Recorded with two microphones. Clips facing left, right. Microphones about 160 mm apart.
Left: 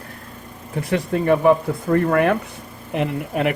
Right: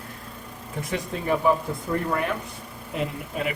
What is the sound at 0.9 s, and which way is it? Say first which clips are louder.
Speech: left 8 dB; 65° left (ahead or behind).